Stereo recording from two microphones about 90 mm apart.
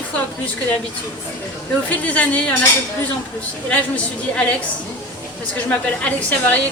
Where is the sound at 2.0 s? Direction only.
15° left (ahead or behind).